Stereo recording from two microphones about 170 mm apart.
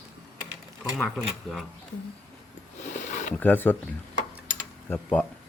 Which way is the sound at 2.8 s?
45° left (ahead or behind).